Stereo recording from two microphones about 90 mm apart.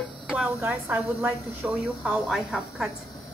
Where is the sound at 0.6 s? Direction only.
20° right (ahead or behind).